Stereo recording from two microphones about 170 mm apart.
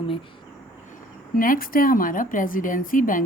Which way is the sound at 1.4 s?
55° left (ahead or behind).